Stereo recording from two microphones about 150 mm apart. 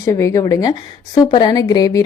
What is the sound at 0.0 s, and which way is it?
A woman's voice, 20° left (ahead or behind).